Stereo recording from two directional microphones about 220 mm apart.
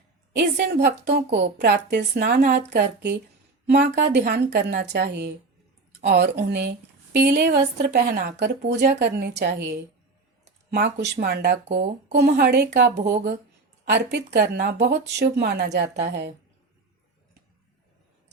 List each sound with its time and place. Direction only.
0.3 s a woman's voice: 50° right (ahead or behind)